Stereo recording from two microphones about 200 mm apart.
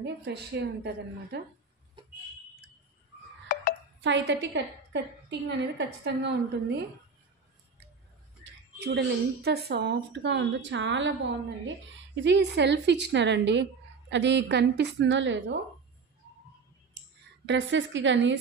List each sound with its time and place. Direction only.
0.0 s a woman's voice: 55° right (ahead or behind)
3.5 s music: 40° left (ahead or behind)
4.0 s a woman's voice: 60° right (ahead or behind)
8.7 s a woman's voice: 55° right (ahead or behind)
17.5 s a woman's voice: 65° right (ahead or behind)